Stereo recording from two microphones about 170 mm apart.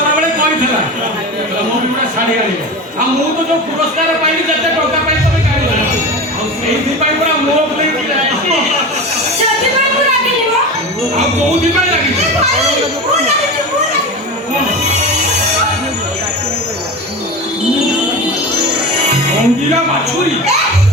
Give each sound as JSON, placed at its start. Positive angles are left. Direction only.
{"t": 19.0, "sound": "music", "side_deg": -40}